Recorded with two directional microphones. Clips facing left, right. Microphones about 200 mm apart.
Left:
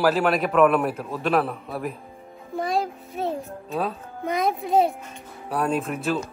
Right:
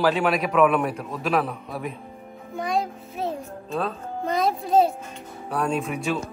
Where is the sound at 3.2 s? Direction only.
Centre (ahead or behind).